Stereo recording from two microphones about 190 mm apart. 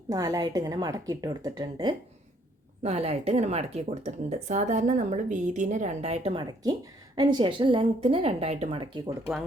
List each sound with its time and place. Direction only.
0.1 s a woman's voice: 20° right (ahead or behind)
2.8 s a woman's voice: 35° right (ahead or behind)